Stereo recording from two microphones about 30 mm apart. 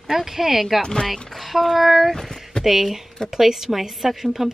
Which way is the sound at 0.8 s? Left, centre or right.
Left.